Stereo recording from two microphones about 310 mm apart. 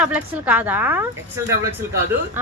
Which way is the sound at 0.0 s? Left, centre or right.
Centre.